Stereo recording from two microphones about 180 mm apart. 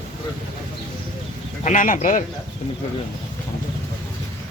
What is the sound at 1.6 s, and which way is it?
Speech, 45° left (ahead or behind).